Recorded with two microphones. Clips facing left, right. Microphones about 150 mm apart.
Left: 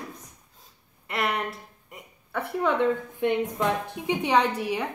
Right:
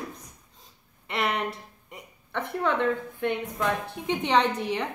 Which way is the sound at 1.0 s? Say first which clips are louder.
Even; centre (ahead or behind).